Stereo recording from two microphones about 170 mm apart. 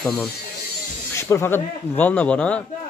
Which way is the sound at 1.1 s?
15° left (ahead or behind).